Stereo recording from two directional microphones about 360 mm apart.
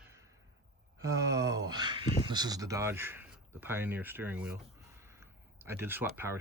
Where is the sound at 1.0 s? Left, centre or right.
Centre.